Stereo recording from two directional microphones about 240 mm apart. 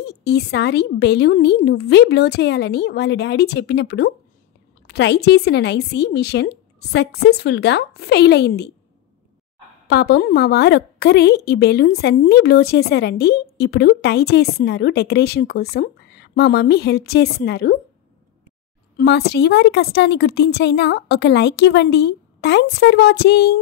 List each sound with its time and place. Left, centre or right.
0.0 s a woman's voice: left
9.8 s a woman's voice: left
18.9 s a woman's voice: left